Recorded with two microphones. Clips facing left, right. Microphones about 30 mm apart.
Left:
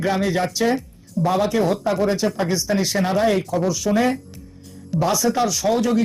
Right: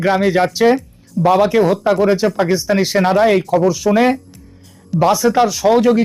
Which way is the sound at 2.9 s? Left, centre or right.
Right.